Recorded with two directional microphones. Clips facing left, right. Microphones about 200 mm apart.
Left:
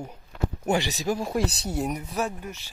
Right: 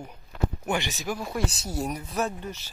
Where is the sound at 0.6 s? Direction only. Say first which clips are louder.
Left 7 dB; 35° left (ahead or behind).